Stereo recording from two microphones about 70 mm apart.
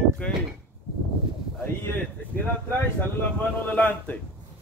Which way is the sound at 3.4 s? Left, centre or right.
Left.